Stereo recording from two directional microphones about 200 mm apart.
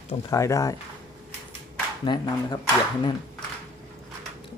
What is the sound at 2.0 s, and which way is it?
Speech, 20° left (ahead or behind).